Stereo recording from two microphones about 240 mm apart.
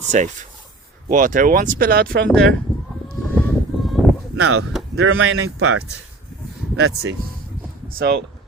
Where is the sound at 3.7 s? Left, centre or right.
Centre.